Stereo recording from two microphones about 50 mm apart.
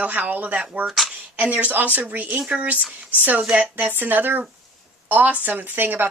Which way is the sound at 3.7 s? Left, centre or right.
Right.